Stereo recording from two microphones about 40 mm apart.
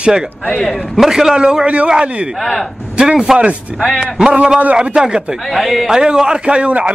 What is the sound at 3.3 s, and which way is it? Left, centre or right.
Speech, centre.